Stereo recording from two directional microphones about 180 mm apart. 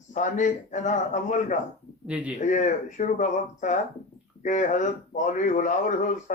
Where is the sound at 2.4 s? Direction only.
45° left (ahead or behind).